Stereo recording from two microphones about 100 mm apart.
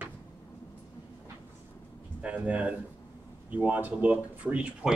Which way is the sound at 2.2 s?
15° right (ahead or behind).